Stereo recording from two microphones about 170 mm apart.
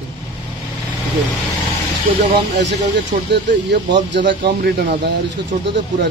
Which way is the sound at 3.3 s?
90° right.